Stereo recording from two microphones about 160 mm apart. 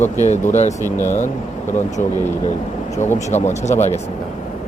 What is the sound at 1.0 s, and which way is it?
Speech, 15° left (ahead or behind).